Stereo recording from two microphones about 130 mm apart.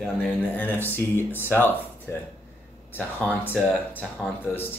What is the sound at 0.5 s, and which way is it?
Speech, 15° left (ahead or behind).